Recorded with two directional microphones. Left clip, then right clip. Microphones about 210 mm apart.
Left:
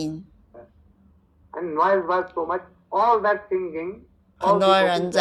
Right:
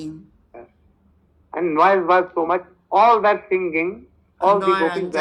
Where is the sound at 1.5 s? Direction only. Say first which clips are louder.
Right 5 dB; 40° right (ahead or behind).